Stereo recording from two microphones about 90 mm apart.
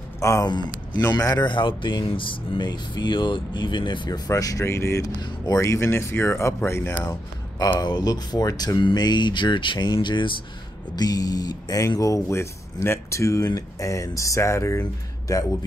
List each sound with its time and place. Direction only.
0.2 s speech: 35° left (ahead or behind)
0.5 s speech: 60° left (ahead or behind)
1.1 s speech: 50° left (ahead or behind)
1.5 s speech: 65° left (ahead or behind)
4.3 s speech: 40° left (ahead or behind); by 7.2 s 20° left (ahead or behind)
7.5 s speech: 50° left (ahead or behind); by 10.3 s 65° left (ahead or behind)
11.0 s speech: 45° left (ahead or behind)